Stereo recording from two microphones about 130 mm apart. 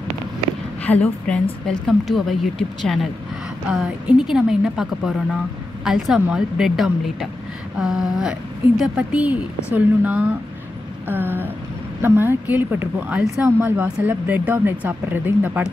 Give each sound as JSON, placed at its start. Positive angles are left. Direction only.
{"t": 1.0, "sound": "speech", "side_deg": 5}